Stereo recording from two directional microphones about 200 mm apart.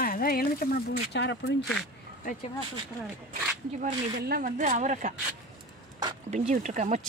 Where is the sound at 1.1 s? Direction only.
60° left (ahead or behind).